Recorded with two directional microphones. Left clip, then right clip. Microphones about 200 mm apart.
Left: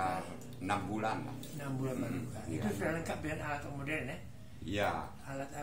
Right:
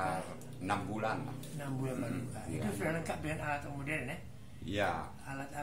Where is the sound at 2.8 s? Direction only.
10° left (ahead or behind).